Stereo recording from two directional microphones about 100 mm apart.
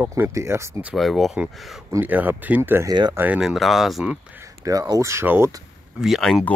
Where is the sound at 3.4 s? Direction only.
Centre (ahead or behind).